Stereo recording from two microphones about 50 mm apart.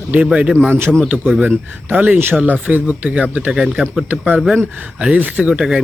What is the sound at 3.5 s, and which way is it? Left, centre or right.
Speech, centre.